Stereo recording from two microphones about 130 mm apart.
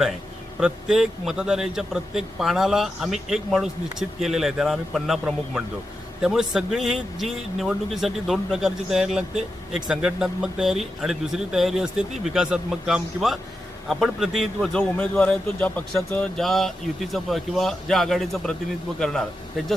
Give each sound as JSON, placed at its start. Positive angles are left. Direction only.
{"t": 0.6, "sound": "a man's voice", "side_deg": -5}